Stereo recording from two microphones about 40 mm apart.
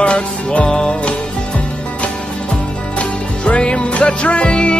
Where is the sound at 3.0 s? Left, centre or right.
Left.